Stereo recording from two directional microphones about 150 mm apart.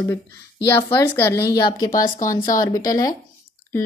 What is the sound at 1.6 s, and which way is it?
Speech, 30° left (ahead or behind).